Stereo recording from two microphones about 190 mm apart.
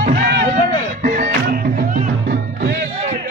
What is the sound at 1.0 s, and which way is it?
Music, 45° right (ahead or behind).